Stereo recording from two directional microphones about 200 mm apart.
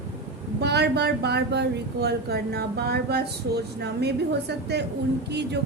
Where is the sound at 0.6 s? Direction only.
55° right (ahead or behind).